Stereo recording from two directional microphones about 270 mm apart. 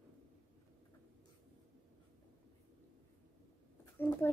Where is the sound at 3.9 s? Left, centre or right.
Centre.